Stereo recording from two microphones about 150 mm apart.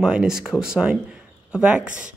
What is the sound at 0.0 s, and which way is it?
Speech, 5° right (ahead or behind).